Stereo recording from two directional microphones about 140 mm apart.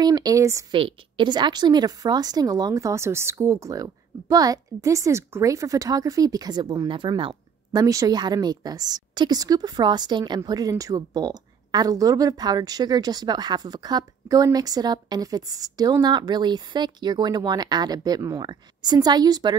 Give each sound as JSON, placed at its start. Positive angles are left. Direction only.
{"t": 0.0, "sound": "speech", "side_deg": -30}
{"t": 0.7, "sound": "a woman's voice", "side_deg": -40}